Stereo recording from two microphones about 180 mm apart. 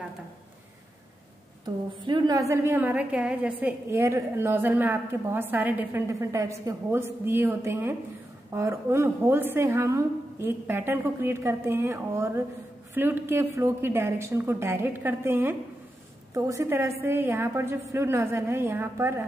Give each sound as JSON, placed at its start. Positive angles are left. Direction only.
{"t": 2.0, "sound": "a woman's voice", "side_deg": -25}